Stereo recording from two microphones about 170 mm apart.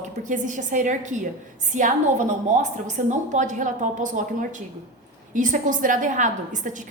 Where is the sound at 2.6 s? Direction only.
45° right (ahead or behind).